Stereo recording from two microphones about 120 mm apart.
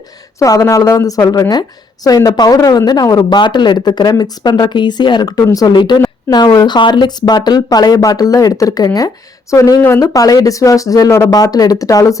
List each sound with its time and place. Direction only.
0.3 s speech: 25° left (ahead or behind)